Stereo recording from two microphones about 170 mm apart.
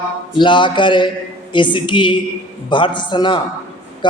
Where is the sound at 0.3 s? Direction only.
30° left (ahead or behind).